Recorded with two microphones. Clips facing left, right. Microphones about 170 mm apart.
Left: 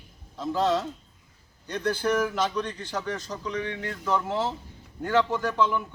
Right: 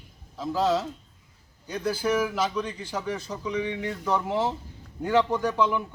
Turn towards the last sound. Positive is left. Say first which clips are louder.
# right 1 dB
turn(degrees=-15)  # may be behind; listen again after turning